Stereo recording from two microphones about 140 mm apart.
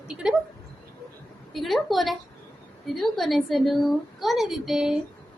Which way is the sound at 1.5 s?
Centre (ahead or behind).